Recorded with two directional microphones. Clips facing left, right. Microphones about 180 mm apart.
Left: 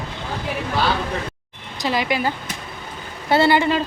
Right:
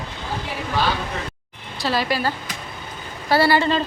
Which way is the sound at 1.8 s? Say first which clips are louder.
Left 1 dB; 15° left (ahead or behind).